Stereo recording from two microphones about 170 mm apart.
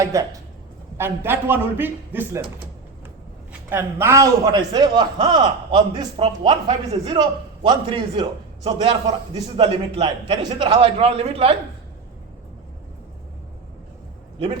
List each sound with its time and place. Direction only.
0.0 s a man's voice: 20° right (ahead or behind)
3.7 s a man's voice: 15° right (ahead or behind); by 11.5 s 35° right (ahead or behind)